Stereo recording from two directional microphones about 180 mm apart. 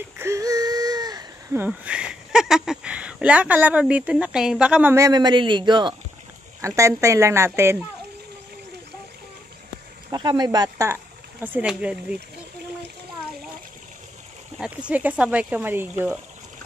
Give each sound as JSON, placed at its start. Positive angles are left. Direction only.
{"t": 0.2, "sound": "a sound", "side_deg": -15}
{"t": 4.9, "sound": "a man's voice", "side_deg": -20}
{"t": 10.1, "sound": "a man's voice", "side_deg": -25}
{"t": 11.4, "sound": "speech", "side_deg": -10}
{"t": 14.6, "sound": "speech", "side_deg": -5}